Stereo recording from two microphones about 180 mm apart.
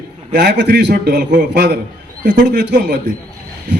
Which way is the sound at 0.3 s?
65° right (ahead or behind).